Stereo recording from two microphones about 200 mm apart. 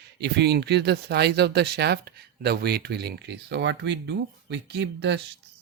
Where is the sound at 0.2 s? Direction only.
55° right (ahead or behind).